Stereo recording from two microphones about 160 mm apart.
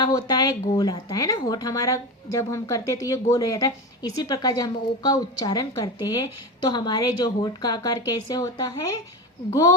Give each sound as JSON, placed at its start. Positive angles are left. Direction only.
{"t": 0.0, "sound": "a woman's voice", "side_deg": 25}